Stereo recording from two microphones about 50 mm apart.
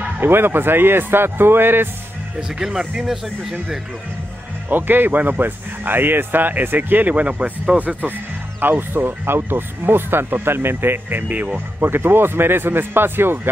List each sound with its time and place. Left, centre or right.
0.2 s speech: right
2.6 s speech: centre
4.6 s speech: right
8.5 s speech: right
11.5 s speech: right